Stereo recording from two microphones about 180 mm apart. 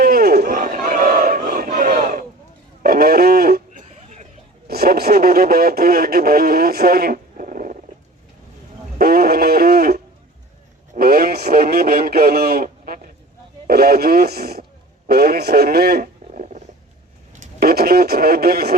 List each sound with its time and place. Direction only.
0.0 s battle cry: 60° right (ahead or behind)
2.8 s a sound: 55° right (ahead or behind); by 4.3 s 40° right (ahead or behind)
4.7 s speech: 60° right (ahead or behind)
9.0 s radio: 55° right (ahead or behind)
13.7 s speech: 60° right (ahead or behind)
15.0 s radio: 55° right (ahead or behind)
17.4 s speech: 55° right (ahead or behind)